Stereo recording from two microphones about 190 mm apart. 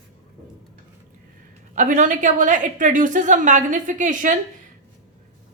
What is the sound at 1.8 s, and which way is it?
A woman's voice, 45° right (ahead or behind).